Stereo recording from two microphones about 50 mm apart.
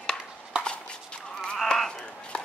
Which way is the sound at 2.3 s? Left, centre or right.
Left.